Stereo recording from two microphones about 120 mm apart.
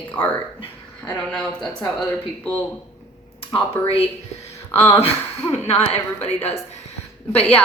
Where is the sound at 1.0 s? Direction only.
10° left (ahead or behind).